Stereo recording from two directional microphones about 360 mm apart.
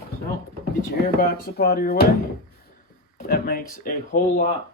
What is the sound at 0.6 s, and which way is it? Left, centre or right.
Speech, left.